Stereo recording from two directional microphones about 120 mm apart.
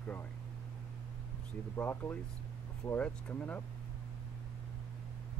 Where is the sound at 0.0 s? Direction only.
15° left (ahead or behind).